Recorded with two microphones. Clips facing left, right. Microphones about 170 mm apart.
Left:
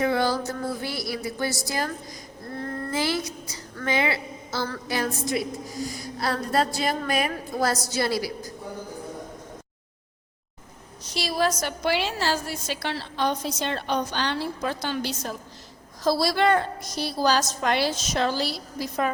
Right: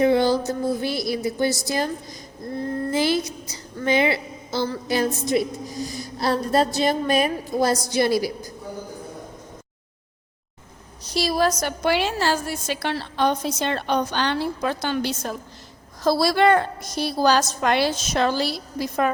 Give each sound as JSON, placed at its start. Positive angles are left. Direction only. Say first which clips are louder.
{"t": 0.0, "sound": "music", "louder": "right 5 dB", "side_deg": -20}
{"t": 1.6, "sound": "a woman's voice", "louder": "right 4 dB", "side_deg": -20}
{"t": 2.6, "sound": "child singing", "louder": "right 5 dB", "side_deg": -20}
{"t": 3.8, "sound": "a woman's voice", "louder": "right 5 dB", "side_deg": -25}
{"t": 11.1, "sound": "a woman's voice", "louder": "right 4 dB", "side_deg": -40}